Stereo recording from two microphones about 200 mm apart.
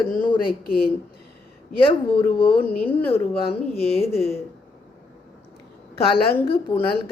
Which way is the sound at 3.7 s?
30° left (ahead or behind).